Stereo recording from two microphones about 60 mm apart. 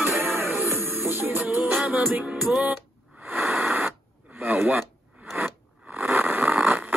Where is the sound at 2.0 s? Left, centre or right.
Right.